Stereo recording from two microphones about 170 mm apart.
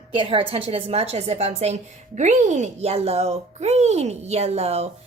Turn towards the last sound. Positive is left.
turn(degrees=-40)  # may be behind; listen again after turning